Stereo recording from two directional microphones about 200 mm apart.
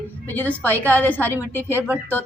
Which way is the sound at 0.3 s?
10° left (ahead or behind).